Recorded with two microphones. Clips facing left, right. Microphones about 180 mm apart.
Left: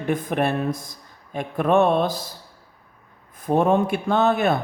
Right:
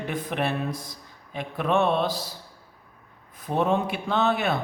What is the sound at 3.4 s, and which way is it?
Speech, 50° left (ahead or behind).